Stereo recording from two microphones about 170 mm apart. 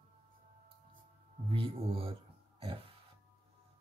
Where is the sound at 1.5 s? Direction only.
35° right (ahead or behind).